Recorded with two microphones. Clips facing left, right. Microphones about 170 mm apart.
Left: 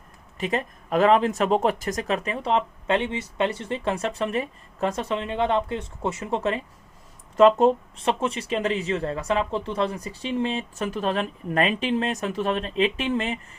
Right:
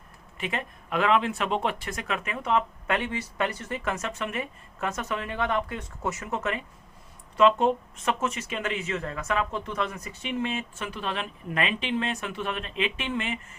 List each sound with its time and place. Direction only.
0.3 s speech: 40° left (ahead or behind)